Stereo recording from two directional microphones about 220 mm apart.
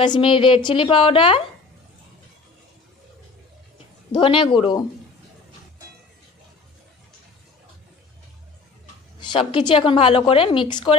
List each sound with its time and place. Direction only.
0.0 s a woman's voice: 20° left (ahead or behind)
4.1 s a woman's voice: 25° left (ahead or behind)
9.2 s a woman's voice: 20° left (ahead or behind)